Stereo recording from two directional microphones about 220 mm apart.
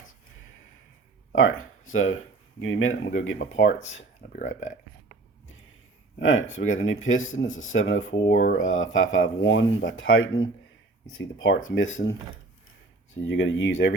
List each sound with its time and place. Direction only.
1.4 s speech: 65° left (ahead or behind)
3.3 s speech: 55° left (ahead or behind)
4.3 s speech: 35° left (ahead or behind)
6.1 s speech: 60° left (ahead or behind)
8.3 s speech: 40° left (ahead or behind)
8.5 s speech: 60° left (ahead or behind)
13.2 s speech: 60° left (ahead or behind)